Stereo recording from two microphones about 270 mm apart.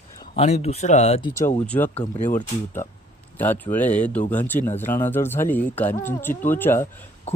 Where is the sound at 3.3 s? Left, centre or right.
Centre.